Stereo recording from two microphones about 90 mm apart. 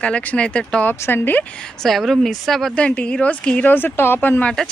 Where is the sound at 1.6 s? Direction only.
5° left (ahead or behind).